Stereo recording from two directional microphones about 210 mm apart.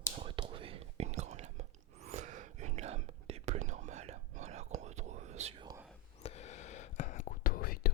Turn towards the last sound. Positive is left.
turn(degrees=45)  # may be behind; listen again after turning